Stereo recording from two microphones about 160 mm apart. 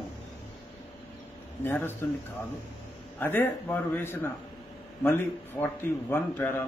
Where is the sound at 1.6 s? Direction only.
15° left (ahead or behind).